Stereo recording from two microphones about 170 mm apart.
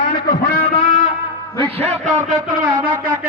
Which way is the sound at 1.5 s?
15° left (ahead or behind).